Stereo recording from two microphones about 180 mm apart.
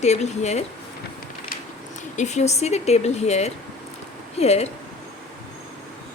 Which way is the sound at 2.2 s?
40° left (ahead or behind).